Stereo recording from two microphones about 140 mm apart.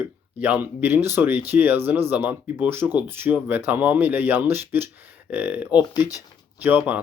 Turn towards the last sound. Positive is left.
turn(degrees=-10)  # may be behind; listen again after turning